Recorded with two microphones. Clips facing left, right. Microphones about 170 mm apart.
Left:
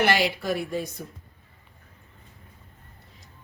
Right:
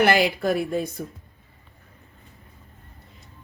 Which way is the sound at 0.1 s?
50° right (ahead or behind).